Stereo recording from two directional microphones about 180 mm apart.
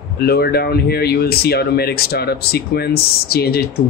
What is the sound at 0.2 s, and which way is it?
Speech, 60° left (ahead or behind).